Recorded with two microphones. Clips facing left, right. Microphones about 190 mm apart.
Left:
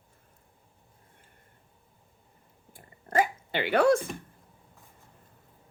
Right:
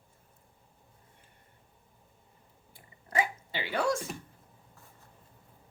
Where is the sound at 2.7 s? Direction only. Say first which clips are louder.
Left 5 dB; 50° left (ahead or behind).